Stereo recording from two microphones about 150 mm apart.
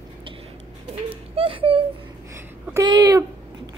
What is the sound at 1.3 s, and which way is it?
Wail, 35° right (ahead or behind).